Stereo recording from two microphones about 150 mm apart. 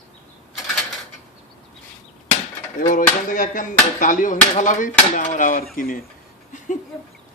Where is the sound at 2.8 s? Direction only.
60° left (ahead or behind).